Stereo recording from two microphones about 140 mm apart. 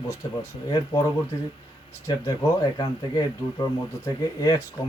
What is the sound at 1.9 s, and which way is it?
Speech, 25° left (ahead or behind).